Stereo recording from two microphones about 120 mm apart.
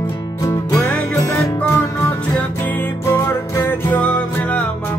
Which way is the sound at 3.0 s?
20° left (ahead or behind).